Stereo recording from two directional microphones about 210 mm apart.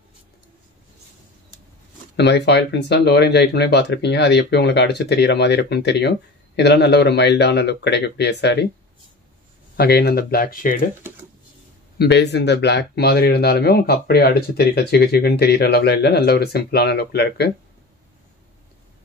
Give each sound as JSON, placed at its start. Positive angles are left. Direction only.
{"t": 2.1, "sound": "speech", "side_deg": 55}
{"t": 9.8, "sound": "speech", "side_deg": 50}
{"t": 12.0, "sound": "speech", "side_deg": 55}